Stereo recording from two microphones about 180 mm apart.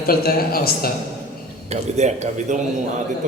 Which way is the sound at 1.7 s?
40° right (ahead or behind).